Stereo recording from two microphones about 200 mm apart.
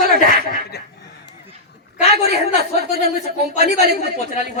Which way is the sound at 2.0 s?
35° left (ahead or behind).